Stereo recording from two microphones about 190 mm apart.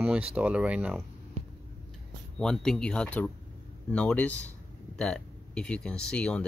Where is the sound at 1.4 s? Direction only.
35° right (ahead or behind).